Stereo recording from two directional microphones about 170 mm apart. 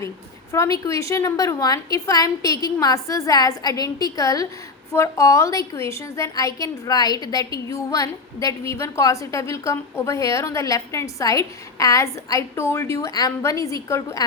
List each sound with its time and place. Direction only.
0.5 s a woman's voice: 20° left (ahead or behind)